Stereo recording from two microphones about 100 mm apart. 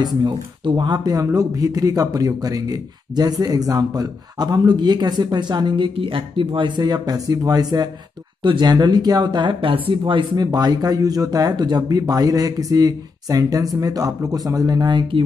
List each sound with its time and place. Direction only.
0.0 s speech: 45° right (ahead or behind)
5.9 s speech: 60° right (ahead or behind); by 7.9 s 40° right (ahead or behind)
8.4 s speech: 50° right (ahead or behind)